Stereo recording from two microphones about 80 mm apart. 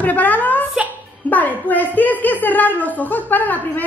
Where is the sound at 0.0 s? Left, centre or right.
Left.